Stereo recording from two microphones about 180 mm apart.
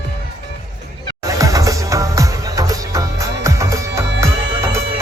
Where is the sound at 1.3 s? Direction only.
20° right (ahead or behind).